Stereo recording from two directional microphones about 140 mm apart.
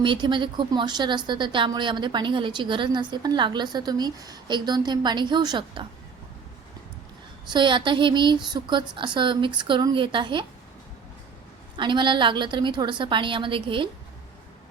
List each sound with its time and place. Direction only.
0.0 s a woman's voice: 35° right (ahead or behind)
7.5 s a woman's voice: 35° right (ahead or behind)
11.8 s a woman's voice: 35° right (ahead or behind)